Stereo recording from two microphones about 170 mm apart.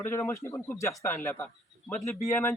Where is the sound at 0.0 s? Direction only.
15° left (ahead or behind).